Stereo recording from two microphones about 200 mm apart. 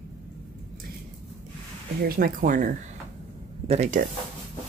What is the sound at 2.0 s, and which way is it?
Speech, 45° right (ahead or behind).